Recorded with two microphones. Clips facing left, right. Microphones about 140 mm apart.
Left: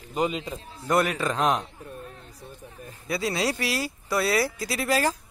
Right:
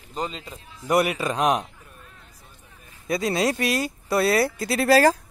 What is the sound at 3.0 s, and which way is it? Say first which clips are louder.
Speech: right 4 dB; 45° right (ahead or behind).